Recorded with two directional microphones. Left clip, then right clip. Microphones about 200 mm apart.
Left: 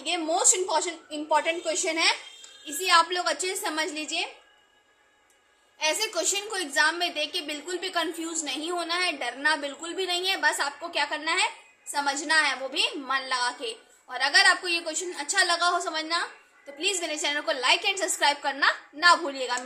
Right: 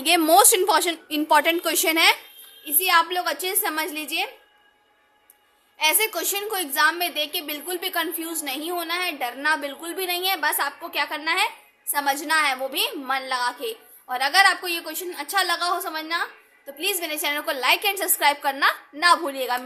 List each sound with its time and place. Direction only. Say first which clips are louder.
0.0 s a woman's voice: right 9 dB; 55° right (ahead or behind)
2.6 s a woman's voice: right 2 dB; 30° right (ahead or behind)
5.8 s a woman's voice: right 4 dB; 35° right (ahead or behind)